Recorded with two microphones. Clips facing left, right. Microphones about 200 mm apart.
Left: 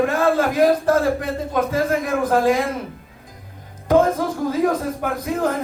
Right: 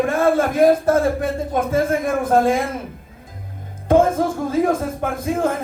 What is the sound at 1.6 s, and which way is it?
Speech, 25° right (ahead or behind).